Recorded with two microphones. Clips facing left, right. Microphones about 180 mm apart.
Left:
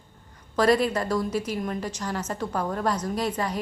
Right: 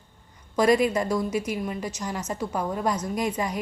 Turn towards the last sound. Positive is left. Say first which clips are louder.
# even
turn(degrees=-10)  # may be behind; listen again after turning